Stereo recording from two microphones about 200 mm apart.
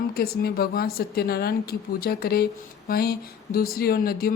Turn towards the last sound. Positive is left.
turn(degrees=50)  # may be behind; listen again after turning